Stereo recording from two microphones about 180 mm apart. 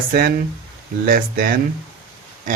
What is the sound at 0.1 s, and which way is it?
Speech, 55° right (ahead or behind).